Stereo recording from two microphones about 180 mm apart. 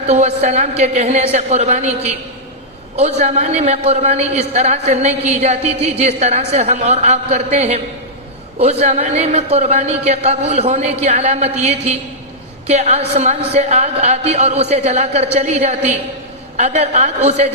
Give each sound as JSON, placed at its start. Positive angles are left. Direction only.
{"t": 0.1, "sound": "a man's voice", "side_deg": -40}
{"t": 8.8, "sound": "a man's voice", "side_deg": -35}